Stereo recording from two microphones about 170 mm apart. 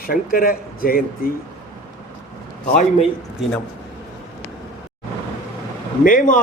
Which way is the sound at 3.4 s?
5° right (ahead or behind).